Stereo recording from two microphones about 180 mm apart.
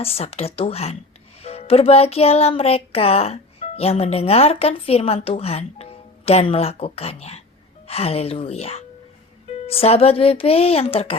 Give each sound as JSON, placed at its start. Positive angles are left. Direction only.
{"t": 0.0, "sound": "music", "side_deg": 35}